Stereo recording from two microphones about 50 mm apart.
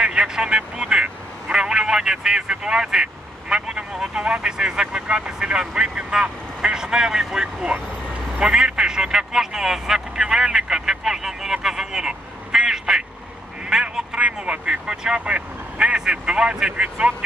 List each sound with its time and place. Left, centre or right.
0.0 s speech: centre